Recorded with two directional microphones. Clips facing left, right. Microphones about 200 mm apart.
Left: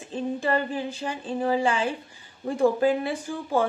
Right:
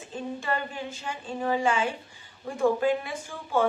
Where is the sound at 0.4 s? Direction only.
35° left (ahead or behind).